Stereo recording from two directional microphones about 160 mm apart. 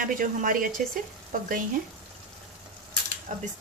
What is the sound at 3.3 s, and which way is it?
Speech, 50° right (ahead or behind).